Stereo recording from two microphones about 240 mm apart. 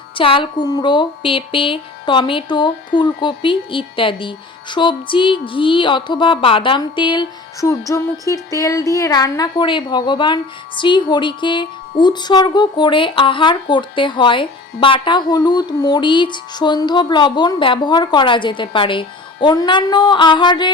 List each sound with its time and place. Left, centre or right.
0.2 s a woman's voice: left